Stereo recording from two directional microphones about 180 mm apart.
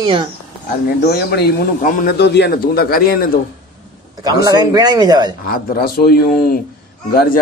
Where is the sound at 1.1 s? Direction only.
65° left (ahead or behind).